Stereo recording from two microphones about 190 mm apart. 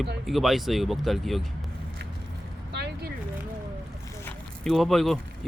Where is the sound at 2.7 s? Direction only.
60° right (ahead or behind).